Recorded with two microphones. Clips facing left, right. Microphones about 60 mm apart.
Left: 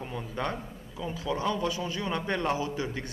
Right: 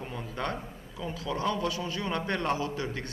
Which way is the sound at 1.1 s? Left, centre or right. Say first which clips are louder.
Left 1 dB; centre.